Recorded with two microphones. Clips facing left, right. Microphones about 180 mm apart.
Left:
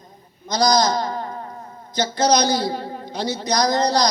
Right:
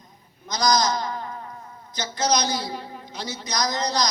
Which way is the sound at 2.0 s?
30° left (ahead or behind).